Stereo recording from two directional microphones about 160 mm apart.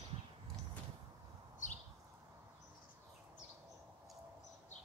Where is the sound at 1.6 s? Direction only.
50° left (ahead or behind).